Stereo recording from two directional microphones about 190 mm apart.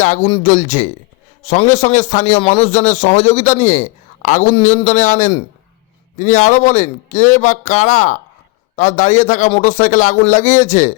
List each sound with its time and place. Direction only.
0.0 s a man's voice: 40° left (ahead or behind)